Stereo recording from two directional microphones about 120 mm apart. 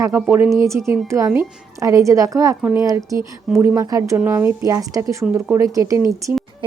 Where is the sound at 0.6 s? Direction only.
25° right (ahead or behind).